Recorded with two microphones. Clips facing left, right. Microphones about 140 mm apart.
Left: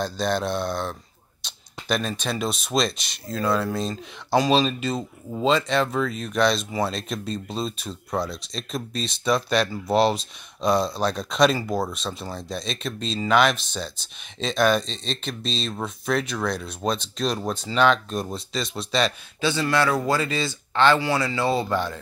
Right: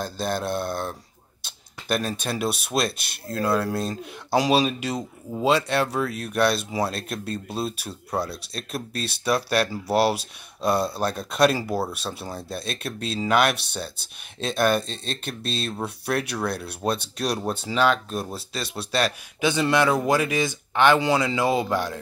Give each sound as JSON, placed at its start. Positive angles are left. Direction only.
{"t": 0.0, "sound": "speech", "side_deg": -5}
{"t": 19.4, "sound": "speech", "side_deg": -20}